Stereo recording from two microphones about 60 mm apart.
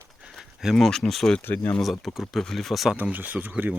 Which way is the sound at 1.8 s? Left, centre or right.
Centre.